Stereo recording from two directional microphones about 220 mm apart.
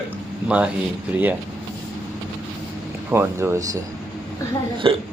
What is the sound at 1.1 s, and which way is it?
Speech, 10° right (ahead or behind).